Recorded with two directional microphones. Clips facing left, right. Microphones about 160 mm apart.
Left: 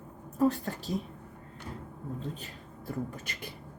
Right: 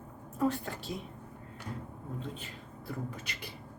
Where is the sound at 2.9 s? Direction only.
45° left (ahead or behind).